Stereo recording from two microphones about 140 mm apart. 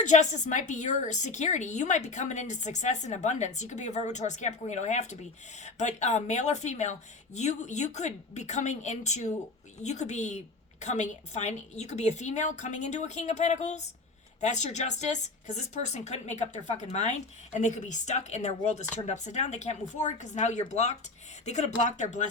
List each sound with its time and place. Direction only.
0.0 s a woman's voice: 60° left (ahead or behind)